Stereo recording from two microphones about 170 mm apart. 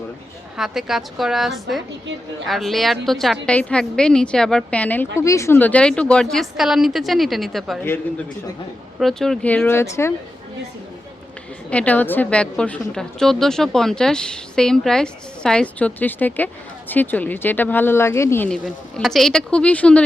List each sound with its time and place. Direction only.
0.5 s a woman's voice: centre (ahead or behind)
9.0 s speech: centre (ahead or behind)
11.7 s a woman's voice: 10° left (ahead or behind)